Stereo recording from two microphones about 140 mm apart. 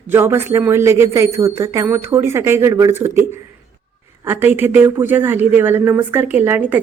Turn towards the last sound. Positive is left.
turn(degrees=-15)  # may be behind; listen again after turning